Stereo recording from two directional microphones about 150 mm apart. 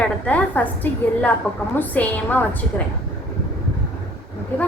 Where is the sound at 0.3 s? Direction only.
10° left (ahead or behind).